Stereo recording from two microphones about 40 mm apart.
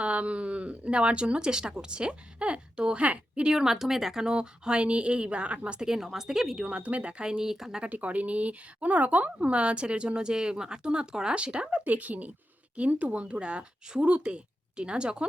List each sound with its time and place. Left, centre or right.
0.0 s speech: right
3.4 s speech: centre; by 5.8 s right
5.8 s speech: centre
6.7 s speech: right
7.5 s speech: centre
7.9 s speech: right
11.9 s a woman's voice: right